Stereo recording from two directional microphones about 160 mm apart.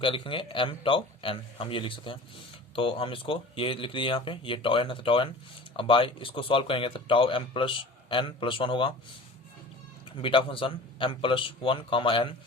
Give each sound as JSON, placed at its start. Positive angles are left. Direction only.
{"t": 0.0, "sound": "speech", "side_deg": 35}
{"t": 10.2, "sound": "speech", "side_deg": 30}